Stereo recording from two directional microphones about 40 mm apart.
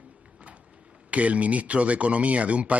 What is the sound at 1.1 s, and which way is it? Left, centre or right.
Speech, right.